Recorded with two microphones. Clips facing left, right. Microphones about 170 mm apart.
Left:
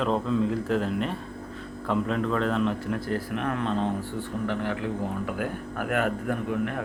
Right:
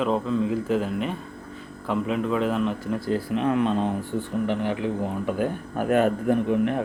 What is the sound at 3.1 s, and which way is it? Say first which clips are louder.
A man's voice: right 8 dB; 15° right (ahead or behind).